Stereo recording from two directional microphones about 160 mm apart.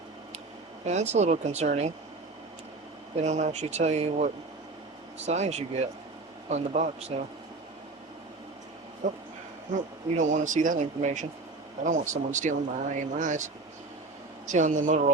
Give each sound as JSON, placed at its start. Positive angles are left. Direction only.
{"t": 0.9, "sound": "speech", "side_deg": -45}
{"t": 3.2, "sound": "speech", "side_deg": -45}
{"t": 9.0, "sound": "speech", "side_deg": -50}